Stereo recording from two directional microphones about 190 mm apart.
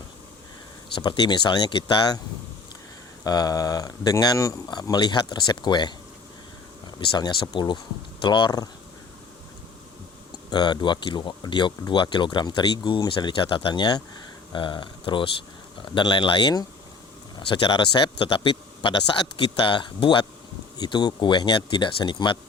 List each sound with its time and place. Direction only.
1.0 s speech: 20° left (ahead or behind)
3.2 s speech: 20° left (ahead or behind)
7.2 s speech: 25° left (ahead or behind)
10.5 s speech: 20° left (ahead or behind)